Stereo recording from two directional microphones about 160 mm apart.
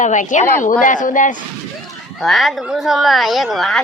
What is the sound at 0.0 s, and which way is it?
A woman's voice, 50° left (ahead or behind).